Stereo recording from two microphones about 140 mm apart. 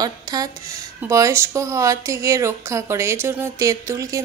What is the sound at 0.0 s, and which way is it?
Speech, 25° right (ahead or behind).